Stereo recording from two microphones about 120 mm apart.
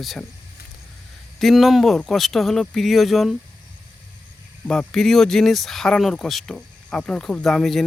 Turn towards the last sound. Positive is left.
turn(degrees=0)  # may be behind; listen again after turning